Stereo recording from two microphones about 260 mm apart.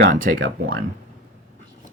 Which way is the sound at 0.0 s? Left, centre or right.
Right.